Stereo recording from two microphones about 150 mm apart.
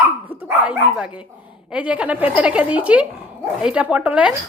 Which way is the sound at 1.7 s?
10° right (ahead or behind).